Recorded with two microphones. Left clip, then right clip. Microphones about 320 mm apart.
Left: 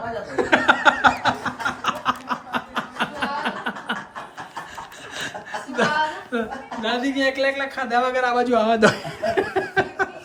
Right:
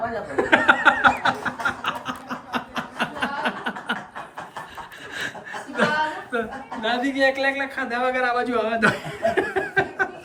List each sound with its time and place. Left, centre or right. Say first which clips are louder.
0.3 s chuckle: even; centre
1.8 s chuckle: left 5 dB; left
2.3 s snicker: left 3 dB; centre
5.1 s chuckle: left 1 dB; centre
6.3 s a sound: right 1 dB; centre
6.8 s a man's voice: right 1 dB; centre